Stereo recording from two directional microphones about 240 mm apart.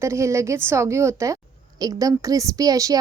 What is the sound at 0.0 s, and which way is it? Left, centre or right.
A woman's voice, centre.